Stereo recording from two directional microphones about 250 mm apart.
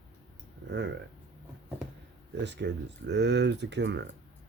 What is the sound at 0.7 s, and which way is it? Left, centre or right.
Speech, right.